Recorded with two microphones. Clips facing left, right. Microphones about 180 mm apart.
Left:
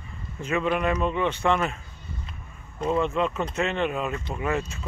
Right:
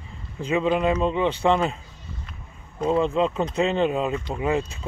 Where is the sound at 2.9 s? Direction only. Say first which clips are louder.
Right 3 dB; 30° right (ahead or behind).